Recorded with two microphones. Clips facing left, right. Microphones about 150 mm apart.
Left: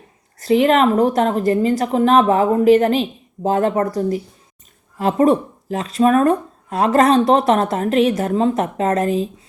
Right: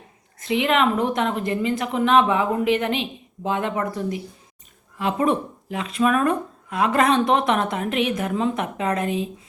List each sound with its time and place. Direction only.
0.3 s speech: 40° left (ahead or behind)